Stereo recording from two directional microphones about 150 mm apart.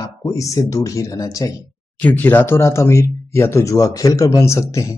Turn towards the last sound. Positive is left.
turn(degrees=20)  # may be behind; listen again after turning